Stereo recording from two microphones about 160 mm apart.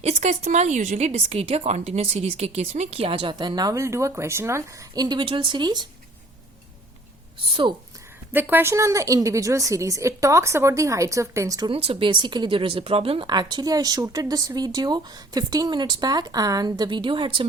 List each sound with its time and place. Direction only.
0.0 s speech: 45° right (ahead or behind); by 5.8 s 30° right (ahead or behind)
8.3 s speech: 10° right (ahead or behind)
11.7 s speech: 35° right (ahead or behind)